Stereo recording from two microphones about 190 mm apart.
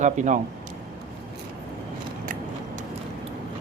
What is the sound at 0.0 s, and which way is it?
Speech, 40° right (ahead or behind).